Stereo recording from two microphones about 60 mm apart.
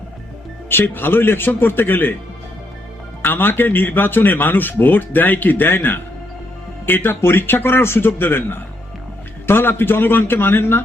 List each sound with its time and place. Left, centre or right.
0.7 s speech: left
3.2 s speech: left